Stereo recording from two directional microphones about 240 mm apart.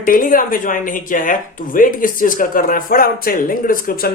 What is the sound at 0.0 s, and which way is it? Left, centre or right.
Speech, left.